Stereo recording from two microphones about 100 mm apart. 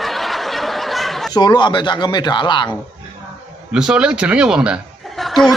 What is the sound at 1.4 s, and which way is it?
Speech, 45° left (ahead or behind).